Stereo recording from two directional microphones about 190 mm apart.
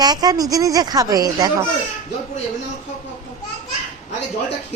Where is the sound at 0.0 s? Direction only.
20° right (ahead or behind).